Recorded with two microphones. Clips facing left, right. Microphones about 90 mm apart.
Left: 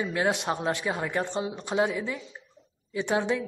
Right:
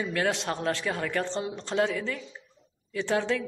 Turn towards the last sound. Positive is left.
turn(degrees=20)  # may be behind; listen again after turning